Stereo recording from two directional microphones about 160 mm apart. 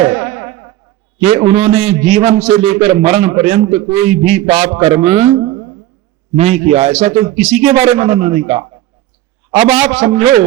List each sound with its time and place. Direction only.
0.3 s fly: 40° right (ahead or behind)
1.2 s a man's voice: 40° right (ahead or behind)